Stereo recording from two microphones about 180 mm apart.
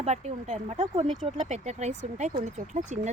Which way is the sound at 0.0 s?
40° right (ahead or behind).